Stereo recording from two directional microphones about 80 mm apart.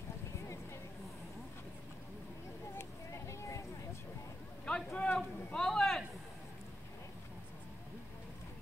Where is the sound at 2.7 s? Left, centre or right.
Left.